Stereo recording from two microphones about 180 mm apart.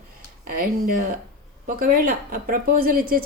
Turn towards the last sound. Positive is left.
turn(degrees=-55)  # may be behind; listen again after turning